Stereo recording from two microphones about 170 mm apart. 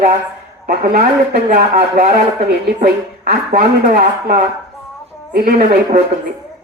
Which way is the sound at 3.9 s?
50° right (ahead or behind).